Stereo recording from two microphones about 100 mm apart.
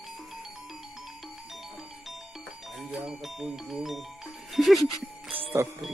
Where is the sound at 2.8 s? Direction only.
5° right (ahead or behind).